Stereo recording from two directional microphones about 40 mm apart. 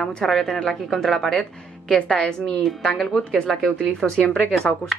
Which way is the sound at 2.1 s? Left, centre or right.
Centre.